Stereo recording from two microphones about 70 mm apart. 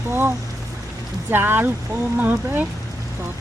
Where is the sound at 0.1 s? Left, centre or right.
Right.